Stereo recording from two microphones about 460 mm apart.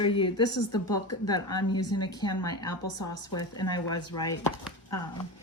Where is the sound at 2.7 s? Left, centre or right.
Left.